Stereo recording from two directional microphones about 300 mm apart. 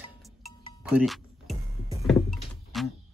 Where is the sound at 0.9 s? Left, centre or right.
Centre.